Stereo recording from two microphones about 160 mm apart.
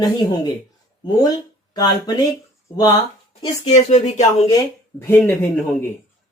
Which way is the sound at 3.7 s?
45° left (ahead or behind).